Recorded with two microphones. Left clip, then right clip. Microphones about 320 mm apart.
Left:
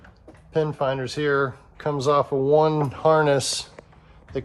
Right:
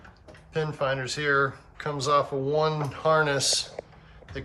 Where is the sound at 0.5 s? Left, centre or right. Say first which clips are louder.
Left 4 dB; centre.